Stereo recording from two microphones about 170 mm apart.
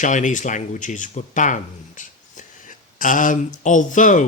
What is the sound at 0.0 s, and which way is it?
Speech, 45° left (ahead or behind).